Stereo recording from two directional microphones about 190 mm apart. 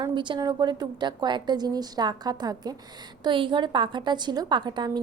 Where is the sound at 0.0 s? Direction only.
25° right (ahead or behind).